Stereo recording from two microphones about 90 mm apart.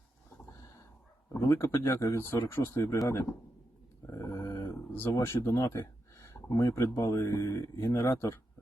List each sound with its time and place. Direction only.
1.3 s speech: 30° left (ahead or behind)
4.0 s a sound: 30° left (ahead or behind)
6.6 s speech: 35° left (ahead or behind)